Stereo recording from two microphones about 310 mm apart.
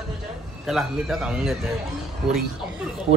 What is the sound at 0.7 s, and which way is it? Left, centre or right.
A man's voice, centre.